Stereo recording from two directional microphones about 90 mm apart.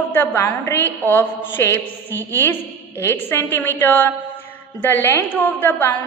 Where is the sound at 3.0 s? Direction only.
25° left (ahead or behind).